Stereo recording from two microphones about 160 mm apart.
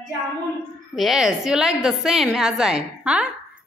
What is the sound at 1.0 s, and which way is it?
A woman's voice, centre (ahead or behind).